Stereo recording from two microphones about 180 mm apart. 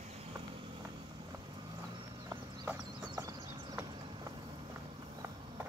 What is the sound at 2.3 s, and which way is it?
Horse, 15° right (ahead or behind).